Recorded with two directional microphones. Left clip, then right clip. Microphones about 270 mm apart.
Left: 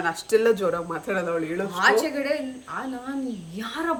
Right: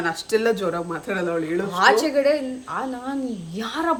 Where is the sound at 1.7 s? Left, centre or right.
Centre.